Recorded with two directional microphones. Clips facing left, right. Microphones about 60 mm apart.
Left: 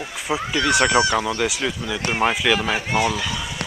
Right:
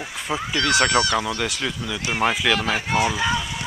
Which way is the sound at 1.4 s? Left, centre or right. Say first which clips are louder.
Left 3 dB; centre.